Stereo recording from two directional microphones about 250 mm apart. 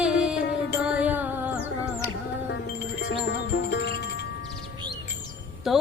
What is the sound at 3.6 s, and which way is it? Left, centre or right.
Music, left.